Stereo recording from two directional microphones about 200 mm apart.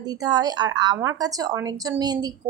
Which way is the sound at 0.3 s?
20° right (ahead or behind).